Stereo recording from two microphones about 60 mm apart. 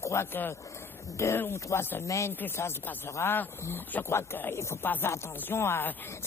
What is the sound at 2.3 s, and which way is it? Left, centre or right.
Speech, left.